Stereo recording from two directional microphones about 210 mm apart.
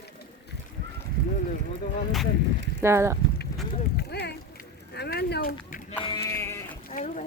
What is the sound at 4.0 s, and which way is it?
Boat, 50° left (ahead or behind).